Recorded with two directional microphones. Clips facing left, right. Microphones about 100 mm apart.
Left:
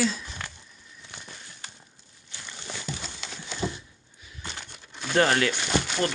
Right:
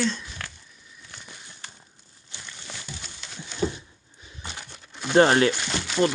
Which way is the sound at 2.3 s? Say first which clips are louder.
Even; 20° right (ahead or behind).